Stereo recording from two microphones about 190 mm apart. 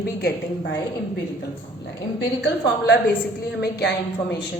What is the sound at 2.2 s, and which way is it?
A woman's voice, 60° left (ahead or behind).